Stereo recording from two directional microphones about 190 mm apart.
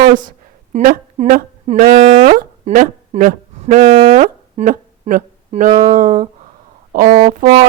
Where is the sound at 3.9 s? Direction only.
50° right (ahead or behind).